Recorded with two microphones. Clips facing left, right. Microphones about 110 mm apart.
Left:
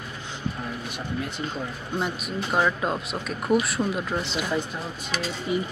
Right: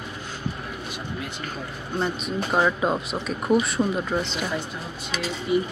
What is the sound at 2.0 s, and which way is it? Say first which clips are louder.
Speech: right 3 dB; 10° left (ahead or behind).